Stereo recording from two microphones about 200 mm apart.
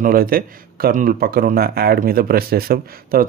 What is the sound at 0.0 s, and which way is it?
Speech, 45° right (ahead or behind).